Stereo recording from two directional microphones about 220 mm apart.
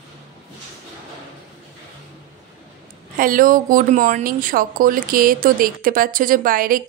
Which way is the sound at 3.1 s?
40° right (ahead or behind).